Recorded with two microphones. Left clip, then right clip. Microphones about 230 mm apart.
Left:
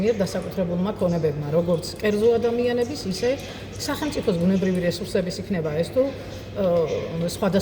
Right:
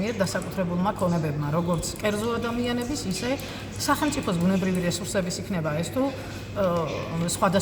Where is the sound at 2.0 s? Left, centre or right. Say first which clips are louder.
Left 8 dB; centre.